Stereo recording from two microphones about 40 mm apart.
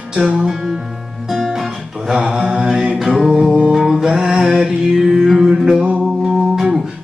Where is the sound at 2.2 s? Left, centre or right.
Centre.